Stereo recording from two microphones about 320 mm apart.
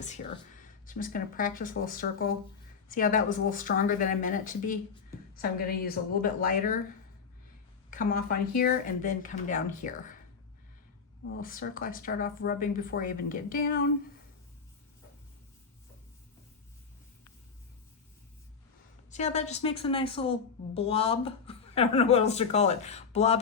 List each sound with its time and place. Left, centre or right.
0.9 s speech: left
7.9 s speech: left
11.3 s speech: left
19.1 s a woman's voice: left